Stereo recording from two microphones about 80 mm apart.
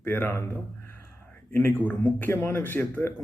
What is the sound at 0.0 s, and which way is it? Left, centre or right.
Speech, left.